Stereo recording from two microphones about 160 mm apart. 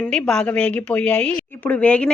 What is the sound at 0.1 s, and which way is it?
Speech, 5° left (ahead or behind).